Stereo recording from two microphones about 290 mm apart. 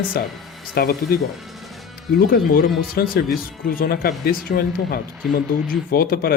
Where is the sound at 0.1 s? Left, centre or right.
Left.